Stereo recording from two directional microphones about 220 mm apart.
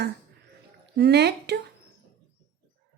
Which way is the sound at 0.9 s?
50° right (ahead or behind).